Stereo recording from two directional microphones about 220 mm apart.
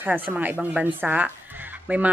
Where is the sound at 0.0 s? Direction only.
10° right (ahead or behind).